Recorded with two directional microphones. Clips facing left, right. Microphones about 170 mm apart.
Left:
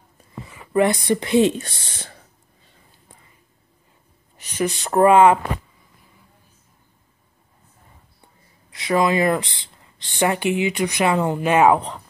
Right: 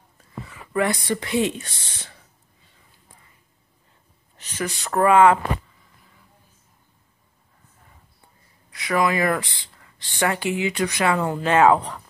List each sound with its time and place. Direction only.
0.5 s speech: 20° left (ahead or behind)
2.0 s a sound: 45° left (ahead or behind)
4.4 s speech: 20° left (ahead or behind)
8.7 s speech: 25° left (ahead or behind)